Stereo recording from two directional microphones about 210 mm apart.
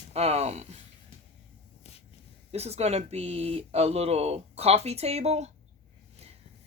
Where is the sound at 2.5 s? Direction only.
30° right (ahead or behind).